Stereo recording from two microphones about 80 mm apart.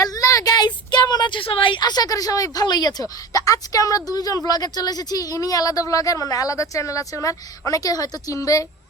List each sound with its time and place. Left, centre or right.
0.0 s speech: left